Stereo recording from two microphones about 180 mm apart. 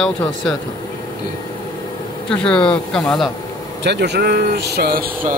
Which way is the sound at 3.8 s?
70° right (ahead or behind).